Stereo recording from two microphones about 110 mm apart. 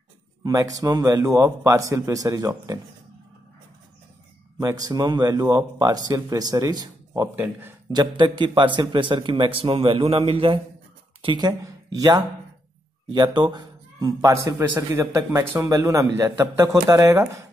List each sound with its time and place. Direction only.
0.4 s speech: 35° right (ahead or behind)
4.6 s speech: 35° right (ahead or behind)
7.3 s a man's voice: 15° right (ahead or behind)
7.9 s a man's voice: 40° right (ahead or behind); by 10.6 s 60° right (ahead or behind)
11.2 s a man's voice: 40° right (ahead or behind)